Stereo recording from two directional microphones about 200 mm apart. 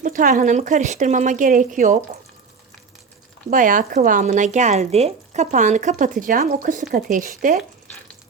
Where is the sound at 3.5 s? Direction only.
40° right (ahead or behind).